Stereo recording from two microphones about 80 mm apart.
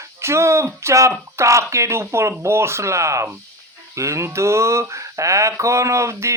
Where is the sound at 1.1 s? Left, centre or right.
Right.